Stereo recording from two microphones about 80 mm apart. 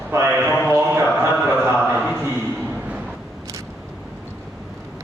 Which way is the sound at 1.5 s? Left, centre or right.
Right.